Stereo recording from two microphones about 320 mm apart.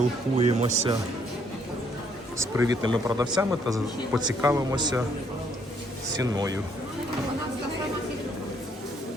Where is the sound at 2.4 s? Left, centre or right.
Centre.